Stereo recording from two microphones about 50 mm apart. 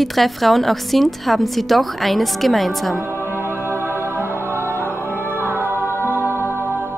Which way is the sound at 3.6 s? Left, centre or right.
Right.